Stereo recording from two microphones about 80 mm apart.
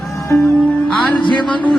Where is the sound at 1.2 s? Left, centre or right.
Left.